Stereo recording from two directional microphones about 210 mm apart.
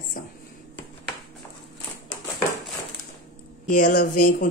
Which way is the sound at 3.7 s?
40° left (ahead or behind).